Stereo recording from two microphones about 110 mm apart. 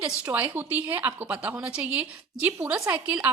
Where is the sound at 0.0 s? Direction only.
15° right (ahead or behind).